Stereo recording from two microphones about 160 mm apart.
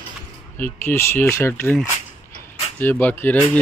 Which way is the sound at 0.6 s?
10° left (ahead or behind).